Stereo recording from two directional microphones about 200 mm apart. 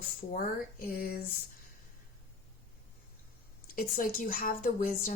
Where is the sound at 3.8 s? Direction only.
45° left (ahead or behind).